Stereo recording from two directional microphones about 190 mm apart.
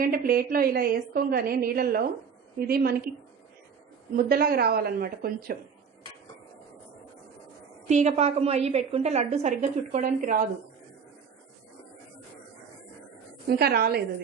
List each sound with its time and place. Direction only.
0.0 s a woman's voice: 50° right (ahead or behind)
4.1 s a woman's voice: 50° right (ahead or behind)
7.9 s a woman's voice: 35° right (ahead or behind)
13.5 s a woman's voice: 55° right (ahead or behind)